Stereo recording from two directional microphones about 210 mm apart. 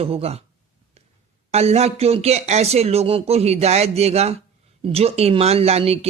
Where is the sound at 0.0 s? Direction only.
30° right (ahead or behind).